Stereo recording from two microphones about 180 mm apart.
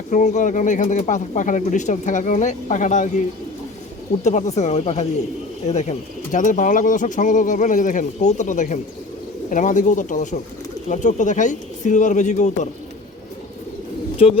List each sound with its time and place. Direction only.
0.1 s speech: 45° left (ahead or behind)
4.2 s speech: 40° left (ahead or behind)
14.2 s speech: 35° left (ahead or behind)